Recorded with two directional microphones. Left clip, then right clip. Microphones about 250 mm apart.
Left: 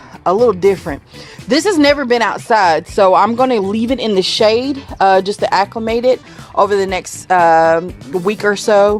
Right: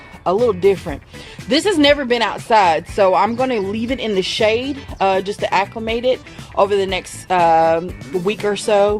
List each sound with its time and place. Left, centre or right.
0.3 s speech: left